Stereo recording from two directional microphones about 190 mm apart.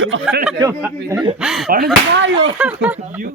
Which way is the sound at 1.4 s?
Centre (ahead or behind).